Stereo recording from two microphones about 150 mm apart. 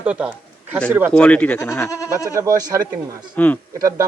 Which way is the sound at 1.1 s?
10° left (ahead or behind).